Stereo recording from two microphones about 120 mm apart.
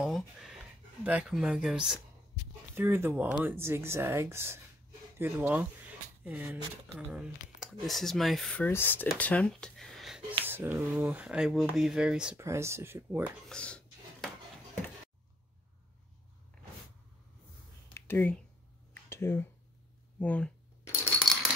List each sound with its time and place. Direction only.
0.0 s a sound: 5° right (ahead or behind)
1.0 s speech: 10° right (ahead or behind)
2.7 s speech: 20° right (ahead or behind); by 8.5 s centre (ahead or behind)
8.5 s speech: 15° left (ahead or behind); by 10.2 s centre (ahead or behind)
10.4 s speech: 20° right (ahead or behind)
12.4 s speech: 25° right (ahead or behind)
13.5 s dishes: 10° left (ahead or behind)
17.9 s a sound: 20° left (ahead or behind)
20.2 s speech: 10° left (ahead or behind)